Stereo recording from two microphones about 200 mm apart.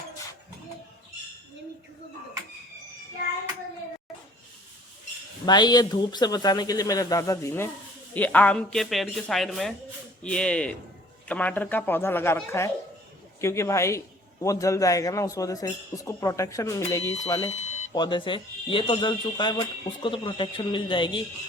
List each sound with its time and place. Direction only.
5.5 s a man's voice: 20° left (ahead or behind)
17.5 s smoke detector: 35° left (ahead or behind)
17.9 s speech: 20° left (ahead or behind)